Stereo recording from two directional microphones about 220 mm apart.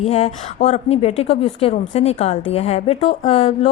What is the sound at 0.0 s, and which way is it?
A woman's voice, 30° left (ahead or behind).